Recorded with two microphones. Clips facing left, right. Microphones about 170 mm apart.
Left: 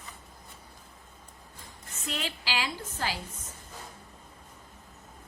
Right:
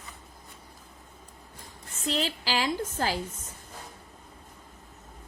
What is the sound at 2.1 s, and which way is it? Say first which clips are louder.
A woman's voice: right 5 dB; 35° right (ahead or behind).